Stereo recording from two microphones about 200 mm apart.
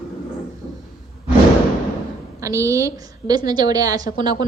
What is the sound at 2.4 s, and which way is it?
A woman's voice, 15° right (ahead or behind).